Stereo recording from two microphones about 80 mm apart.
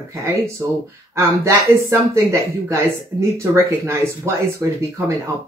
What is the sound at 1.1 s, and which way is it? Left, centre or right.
Speech, right.